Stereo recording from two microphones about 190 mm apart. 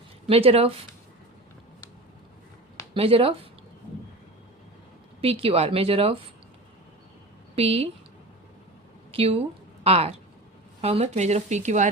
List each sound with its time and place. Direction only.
0.3 s speech: 30° right (ahead or behind)
2.9 s speech: 30° right (ahead or behind)
5.2 s speech: 30° right (ahead or behind)
7.5 s a woman's voice: 30° right (ahead or behind)
9.1 s speech: 30° right (ahead or behind)